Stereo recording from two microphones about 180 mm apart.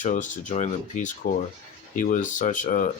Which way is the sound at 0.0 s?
45° left (ahead or behind).